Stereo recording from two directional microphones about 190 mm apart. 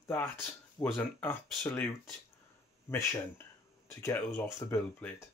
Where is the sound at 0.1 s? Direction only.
10° left (ahead or behind).